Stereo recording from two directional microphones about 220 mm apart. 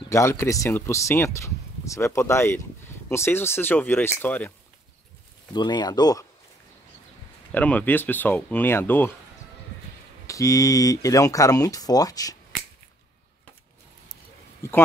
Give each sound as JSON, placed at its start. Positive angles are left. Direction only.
{"t": 0.1, "sound": "speech", "side_deg": 15}
{"t": 5.5, "sound": "speech", "side_deg": 20}
{"t": 7.5, "sound": "speech", "side_deg": 5}
{"t": 10.2, "sound": "speech", "side_deg": 15}
{"t": 14.6, "sound": "speech", "side_deg": 10}